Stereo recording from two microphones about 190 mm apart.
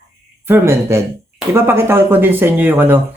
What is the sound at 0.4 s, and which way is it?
Speech, 10° right (ahead or behind).